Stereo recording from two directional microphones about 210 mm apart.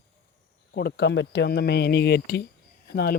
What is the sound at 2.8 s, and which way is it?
Cricket, 50° left (ahead or behind).